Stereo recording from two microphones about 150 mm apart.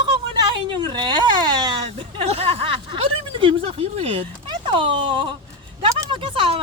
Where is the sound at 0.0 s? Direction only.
30° right (ahead or behind).